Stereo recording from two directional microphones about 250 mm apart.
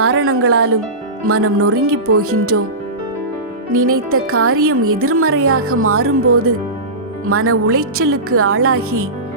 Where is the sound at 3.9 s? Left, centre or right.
Right.